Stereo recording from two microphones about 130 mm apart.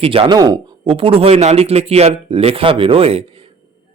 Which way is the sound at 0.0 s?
45° right (ahead or behind).